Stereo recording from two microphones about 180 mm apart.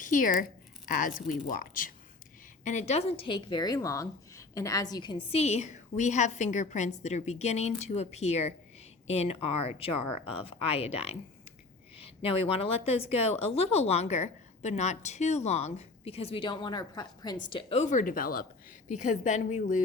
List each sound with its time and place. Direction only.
0.0 s speech: 50° left (ahead or behind)
2.6 s a woman's voice: 40° left (ahead or behind)